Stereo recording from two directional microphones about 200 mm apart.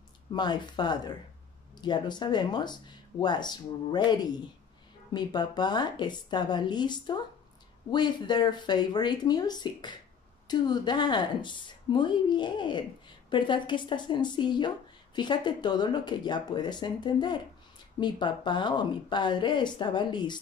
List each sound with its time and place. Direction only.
0.3 s speech: 20° left (ahead or behind)